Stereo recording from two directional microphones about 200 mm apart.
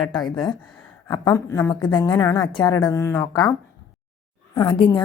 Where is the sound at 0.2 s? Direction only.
20° left (ahead or behind).